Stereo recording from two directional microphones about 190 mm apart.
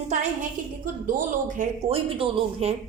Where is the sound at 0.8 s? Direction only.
45° right (ahead or behind).